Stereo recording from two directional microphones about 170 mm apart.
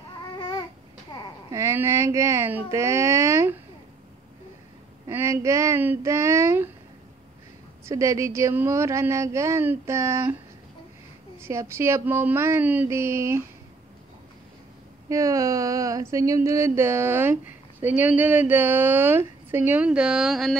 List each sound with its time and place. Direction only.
0.4 s babbling: 25° left (ahead or behind)
1.1 s a sound: 25° left (ahead or behind)
1.5 s speech: 15° right (ahead or behind)
5.0 s speech: 20° right (ahead or behind)
7.9 s speech: 20° right (ahead or behind)
11.4 s speech: 15° right (ahead or behind)
15.0 s speech: 20° right (ahead or behind); by 20.5 s centre (ahead or behind)